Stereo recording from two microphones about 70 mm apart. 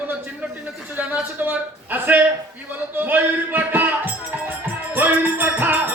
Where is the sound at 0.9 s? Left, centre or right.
Right.